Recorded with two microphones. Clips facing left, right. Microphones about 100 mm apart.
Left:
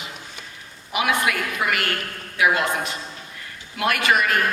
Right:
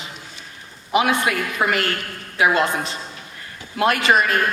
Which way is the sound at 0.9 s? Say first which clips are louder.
Right 3 dB; 30° right (ahead or behind).